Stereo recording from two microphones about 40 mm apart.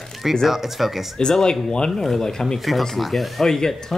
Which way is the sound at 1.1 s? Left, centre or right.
Centre.